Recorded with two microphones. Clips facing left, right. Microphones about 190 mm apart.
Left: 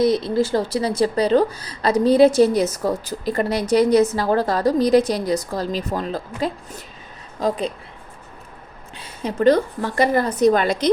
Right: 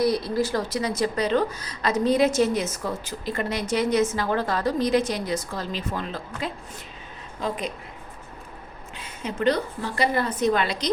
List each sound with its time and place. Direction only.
0.0 s a woman's voice: 25° left (ahead or behind)
9.0 s a woman's voice: 35° left (ahead or behind)